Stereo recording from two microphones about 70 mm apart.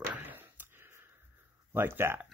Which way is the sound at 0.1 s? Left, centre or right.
Right.